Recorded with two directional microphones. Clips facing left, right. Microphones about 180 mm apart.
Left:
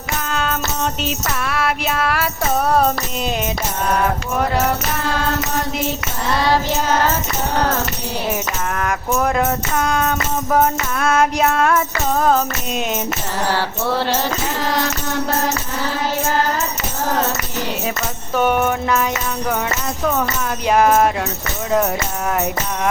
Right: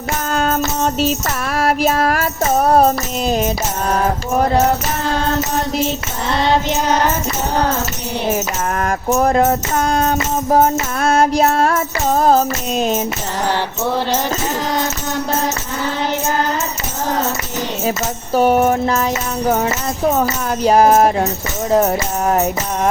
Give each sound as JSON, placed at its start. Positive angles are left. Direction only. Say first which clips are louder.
{"t": 0.3, "sound": "music", "louder": "right 5 dB", "side_deg": -40}
{"t": 6.3, "sound": "music", "louder": "right 2 dB", "side_deg": -20}
{"t": 8.7, "sound": "music", "louder": "right 4 dB", "side_deg": -35}
{"t": 18.3, "sound": "music", "louder": "right 4 dB", "side_deg": -35}